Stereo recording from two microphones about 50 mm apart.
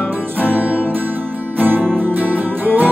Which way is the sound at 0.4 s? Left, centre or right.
Right.